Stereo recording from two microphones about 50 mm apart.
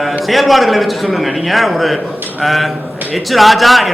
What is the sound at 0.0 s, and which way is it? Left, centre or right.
A man's voice, centre.